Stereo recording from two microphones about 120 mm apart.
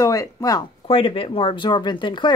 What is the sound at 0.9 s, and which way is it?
Speech, 50° left (ahead or behind).